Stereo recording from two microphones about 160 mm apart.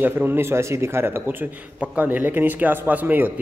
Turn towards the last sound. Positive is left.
turn(degrees=-10)  # may be behind; listen again after turning